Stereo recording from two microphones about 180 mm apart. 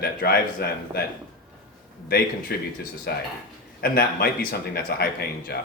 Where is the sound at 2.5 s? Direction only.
55° left (ahead or behind).